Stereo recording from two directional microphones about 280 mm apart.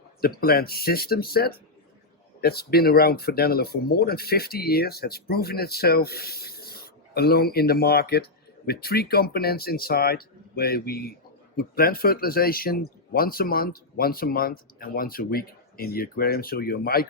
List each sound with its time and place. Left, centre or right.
0.2 s speech: left